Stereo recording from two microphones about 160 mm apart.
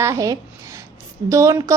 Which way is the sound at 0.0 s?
20° right (ahead or behind).